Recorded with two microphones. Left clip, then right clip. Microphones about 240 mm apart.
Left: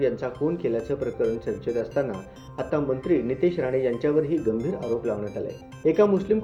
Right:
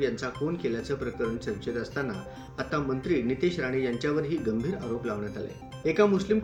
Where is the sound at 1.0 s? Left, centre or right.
Centre.